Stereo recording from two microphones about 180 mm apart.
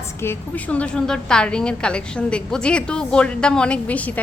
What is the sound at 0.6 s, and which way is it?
A woman's voice, 5° left (ahead or behind).